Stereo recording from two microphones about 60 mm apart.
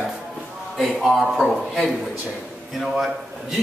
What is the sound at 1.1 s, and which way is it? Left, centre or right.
A man's voice, centre.